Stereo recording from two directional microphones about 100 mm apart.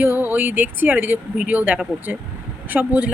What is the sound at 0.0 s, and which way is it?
A woman's voice, 20° right (ahead or behind).